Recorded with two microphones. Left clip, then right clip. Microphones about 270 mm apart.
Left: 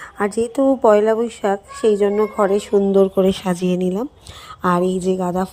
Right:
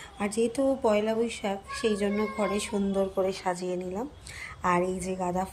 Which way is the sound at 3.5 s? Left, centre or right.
Left.